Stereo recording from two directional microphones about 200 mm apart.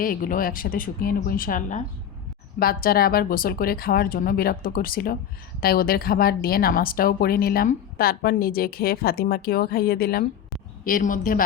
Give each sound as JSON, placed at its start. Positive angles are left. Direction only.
{"t": 0.0, "sound": "speech", "side_deg": 45}